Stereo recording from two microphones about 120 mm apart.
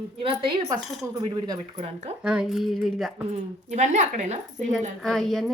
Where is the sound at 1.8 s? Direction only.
70° right (ahead or behind).